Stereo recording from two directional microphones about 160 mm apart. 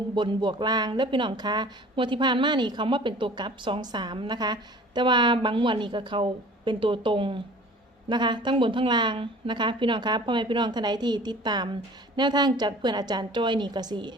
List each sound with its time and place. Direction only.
0.1 s speech: 30° right (ahead or behind)